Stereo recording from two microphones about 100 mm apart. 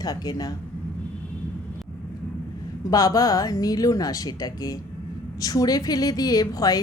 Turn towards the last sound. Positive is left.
turn(degrees=40)  # may be behind; listen again after turning